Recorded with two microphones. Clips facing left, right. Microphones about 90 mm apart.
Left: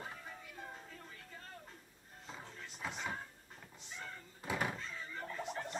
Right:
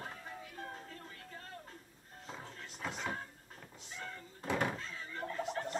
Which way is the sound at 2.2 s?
Centre (ahead or behind).